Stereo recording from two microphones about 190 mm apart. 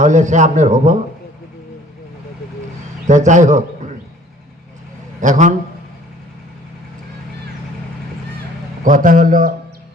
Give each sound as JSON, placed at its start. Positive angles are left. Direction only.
{"t": 0.0, "sound": "a man's voice", "side_deg": -40}
{"t": 3.1, "sound": "a man's voice", "side_deg": -40}
{"t": 5.2, "sound": "a man's voice", "side_deg": -40}
{"t": 8.8, "sound": "a man's voice", "side_deg": -45}